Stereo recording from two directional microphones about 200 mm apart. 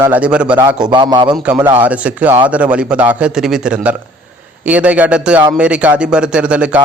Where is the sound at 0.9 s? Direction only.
20° right (ahead or behind).